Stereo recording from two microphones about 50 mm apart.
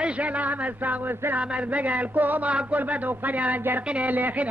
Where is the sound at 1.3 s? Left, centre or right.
Right.